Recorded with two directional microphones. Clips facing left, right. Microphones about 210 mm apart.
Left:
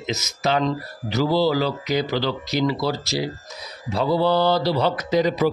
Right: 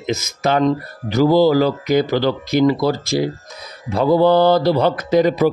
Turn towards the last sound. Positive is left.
turn(degrees=-50)  # may be behind; listen again after turning